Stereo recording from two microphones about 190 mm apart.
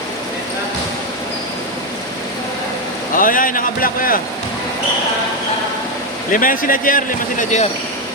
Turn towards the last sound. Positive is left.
turn(degrees=40)  # may be behind; listen again after turning